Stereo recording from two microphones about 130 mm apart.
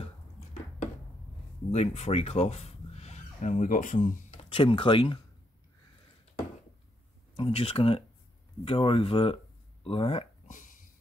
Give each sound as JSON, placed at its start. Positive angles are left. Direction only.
{"t": 1.7, "sound": "speech", "side_deg": 55}
{"t": 4.4, "sound": "speech", "side_deg": 40}
{"t": 7.3, "sound": "speech", "side_deg": 50}
{"t": 10.5, "sound": "a sound", "side_deg": 85}